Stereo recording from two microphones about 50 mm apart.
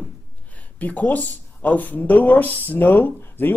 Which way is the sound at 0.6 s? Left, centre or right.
Left.